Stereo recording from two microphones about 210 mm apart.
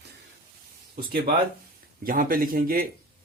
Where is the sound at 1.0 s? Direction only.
45° right (ahead or behind).